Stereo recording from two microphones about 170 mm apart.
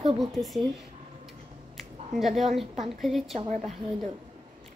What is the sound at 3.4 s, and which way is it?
Speech, 45° right (ahead or behind).